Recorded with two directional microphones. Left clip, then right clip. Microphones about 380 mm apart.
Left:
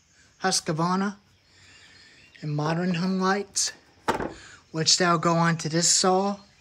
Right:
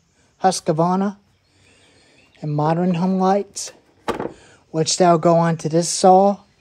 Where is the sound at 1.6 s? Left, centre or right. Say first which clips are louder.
Left 2 dB; centre.